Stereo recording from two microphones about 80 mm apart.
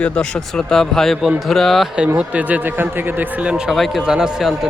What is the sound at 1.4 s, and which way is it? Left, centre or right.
Music, centre.